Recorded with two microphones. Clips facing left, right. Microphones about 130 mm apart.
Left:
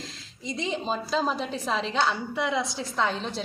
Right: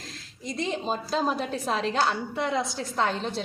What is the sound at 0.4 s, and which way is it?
A woman's voice, centre (ahead or behind).